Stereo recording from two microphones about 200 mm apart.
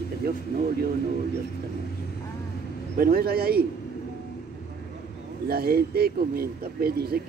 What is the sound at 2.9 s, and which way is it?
Speech, 50° right (ahead or behind).